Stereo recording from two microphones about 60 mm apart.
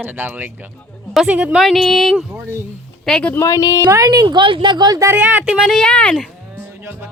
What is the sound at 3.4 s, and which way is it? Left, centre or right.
Speech, left.